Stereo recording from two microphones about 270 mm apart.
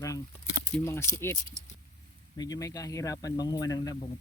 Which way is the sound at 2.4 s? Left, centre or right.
Centre.